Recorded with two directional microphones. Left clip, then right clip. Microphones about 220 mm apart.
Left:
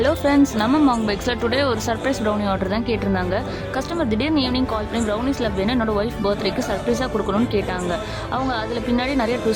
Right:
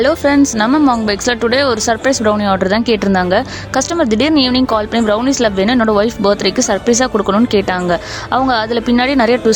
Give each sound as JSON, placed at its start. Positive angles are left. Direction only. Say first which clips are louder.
{"t": 0.0, "sound": "a woman's voice", "louder": "right 6 dB", "side_deg": -25}